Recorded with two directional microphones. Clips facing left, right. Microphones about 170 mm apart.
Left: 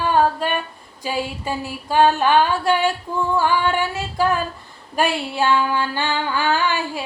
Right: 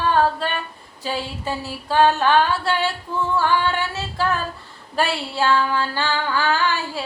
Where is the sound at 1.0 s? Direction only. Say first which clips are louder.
Left 2 dB; 15° left (ahead or behind).